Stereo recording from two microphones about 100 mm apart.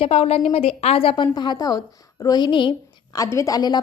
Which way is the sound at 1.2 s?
45° left (ahead or behind).